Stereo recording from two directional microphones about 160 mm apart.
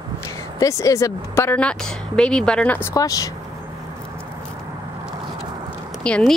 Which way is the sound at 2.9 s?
20° left (ahead or behind).